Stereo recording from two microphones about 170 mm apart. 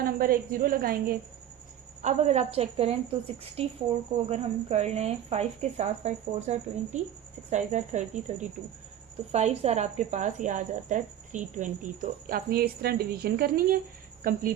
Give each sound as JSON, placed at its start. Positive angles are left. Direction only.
{"t": 0.0, "sound": "a woman's voice", "side_deg": -60}
{"t": 2.0, "sound": "a woman's voice", "side_deg": -45}
{"t": 12.3, "sound": "a woman's voice", "side_deg": -60}